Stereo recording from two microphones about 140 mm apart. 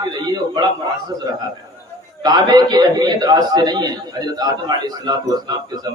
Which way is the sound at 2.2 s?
30° right (ahead or behind).